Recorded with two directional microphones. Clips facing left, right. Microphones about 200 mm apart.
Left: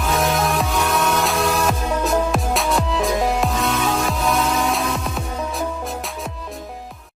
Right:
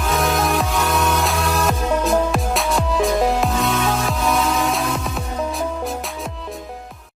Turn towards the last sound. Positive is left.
turn(degrees=0)  # may be behind; listen again after turning